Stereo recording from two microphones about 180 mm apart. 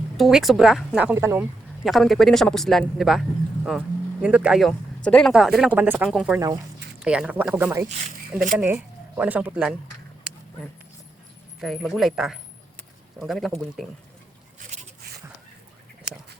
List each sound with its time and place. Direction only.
0.2 s a man's voice: centre (ahead or behind)
1.8 s a man's voice: centre (ahead or behind)
11.6 s a man's voice: centre (ahead or behind)
14.6 s a sound: 50° right (ahead or behind)